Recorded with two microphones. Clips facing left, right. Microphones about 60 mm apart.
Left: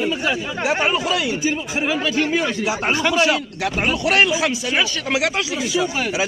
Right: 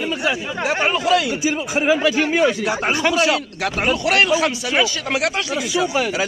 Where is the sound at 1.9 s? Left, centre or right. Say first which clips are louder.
Right 3 dB; centre.